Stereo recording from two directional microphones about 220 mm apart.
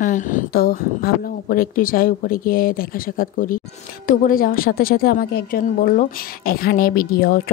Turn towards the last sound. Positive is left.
turn(degrees=40)  # may be behind; listen again after turning